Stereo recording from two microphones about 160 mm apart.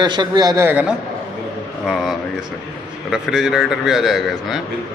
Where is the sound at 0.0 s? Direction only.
25° right (ahead or behind).